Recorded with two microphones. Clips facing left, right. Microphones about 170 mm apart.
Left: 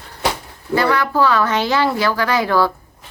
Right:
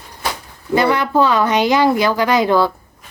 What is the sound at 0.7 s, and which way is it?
Speech, 20° right (ahead or behind).